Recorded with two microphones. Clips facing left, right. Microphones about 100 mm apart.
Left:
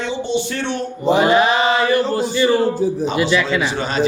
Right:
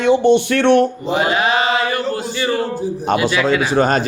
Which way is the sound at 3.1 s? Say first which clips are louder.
Right 2 dB; 50° right (ahead or behind).